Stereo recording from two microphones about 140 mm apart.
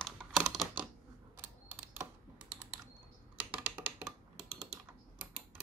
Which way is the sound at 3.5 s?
10° right (ahead or behind).